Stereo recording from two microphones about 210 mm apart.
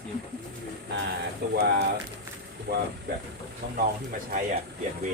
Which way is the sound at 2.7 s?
50° right (ahead or behind).